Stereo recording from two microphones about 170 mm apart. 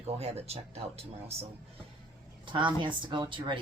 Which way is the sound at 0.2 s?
35° right (ahead or behind).